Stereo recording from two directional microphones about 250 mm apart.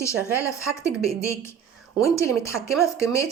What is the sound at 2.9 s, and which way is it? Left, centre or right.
Speech, centre.